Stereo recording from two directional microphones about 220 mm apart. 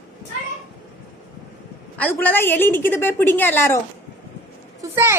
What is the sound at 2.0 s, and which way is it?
A woman's voice, 10° left (ahead or behind).